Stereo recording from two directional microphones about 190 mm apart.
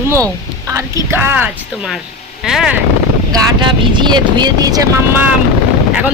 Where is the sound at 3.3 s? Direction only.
25° right (ahead or behind).